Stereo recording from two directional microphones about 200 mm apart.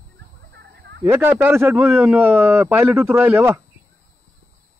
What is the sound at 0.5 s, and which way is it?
Fowl, 55° right (ahead or behind).